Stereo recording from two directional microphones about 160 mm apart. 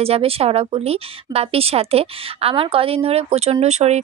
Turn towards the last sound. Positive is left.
turn(degrees=-45)  # may be behind; listen again after turning